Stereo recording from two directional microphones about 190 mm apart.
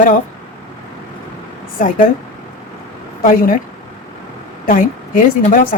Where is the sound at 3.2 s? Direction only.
45° left (ahead or behind).